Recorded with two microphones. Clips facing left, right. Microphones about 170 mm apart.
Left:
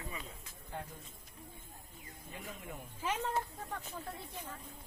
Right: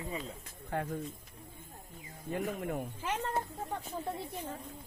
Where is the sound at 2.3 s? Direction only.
60° right (ahead or behind).